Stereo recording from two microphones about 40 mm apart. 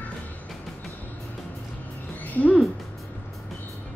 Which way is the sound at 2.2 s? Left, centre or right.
Left.